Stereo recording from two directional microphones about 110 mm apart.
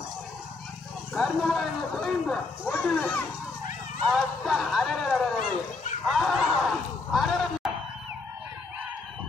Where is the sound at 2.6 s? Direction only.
15° left (ahead or behind).